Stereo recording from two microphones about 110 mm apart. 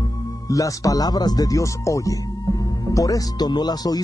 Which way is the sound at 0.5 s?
30° left (ahead or behind).